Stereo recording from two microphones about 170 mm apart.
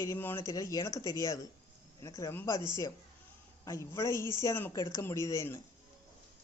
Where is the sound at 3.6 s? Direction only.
15° left (ahead or behind).